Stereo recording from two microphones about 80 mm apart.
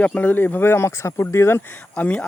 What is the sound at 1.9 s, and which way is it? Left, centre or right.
Speech, centre.